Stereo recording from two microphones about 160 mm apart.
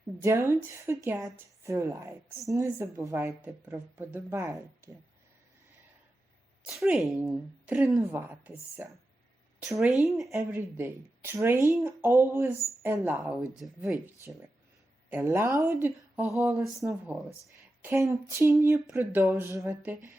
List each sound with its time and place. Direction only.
0.2 s speech: 15° right (ahead or behind)
6.7 s a woman's voice: centre (ahead or behind)
10.3 s speech: 15° right (ahead or behind)
15.1 s speech: 15° right (ahead or behind)
16.3 s a woman's voice: 5° right (ahead or behind)
17.8 s speech: 20° right (ahead or behind)